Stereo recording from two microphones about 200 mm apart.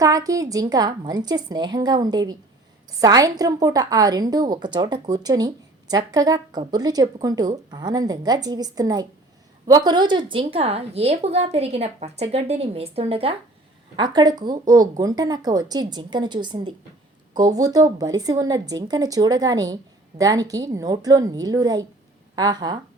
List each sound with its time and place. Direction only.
0.0 s a woman's voice: 15° right (ahead or behind)